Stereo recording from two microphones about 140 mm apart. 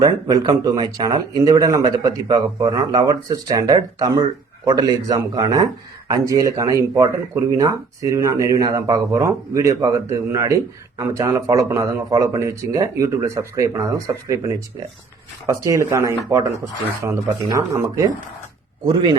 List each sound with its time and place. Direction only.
0.0 s speech: 25° right (ahead or behind)
15.4 s a man's voice: 20° right (ahead or behind)